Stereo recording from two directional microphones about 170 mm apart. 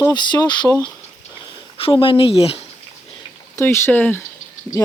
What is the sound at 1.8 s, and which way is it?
Speech, 30° left (ahead or behind).